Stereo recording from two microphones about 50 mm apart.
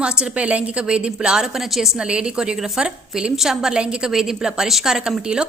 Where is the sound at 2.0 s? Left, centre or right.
Centre.